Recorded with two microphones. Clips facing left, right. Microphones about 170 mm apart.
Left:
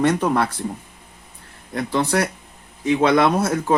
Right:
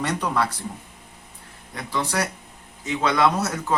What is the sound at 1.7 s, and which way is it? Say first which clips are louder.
Speech: left 6 dB; 55° left (ahead or behind).